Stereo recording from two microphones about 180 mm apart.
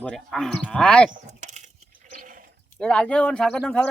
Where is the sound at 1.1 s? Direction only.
40° right (ahead or behind).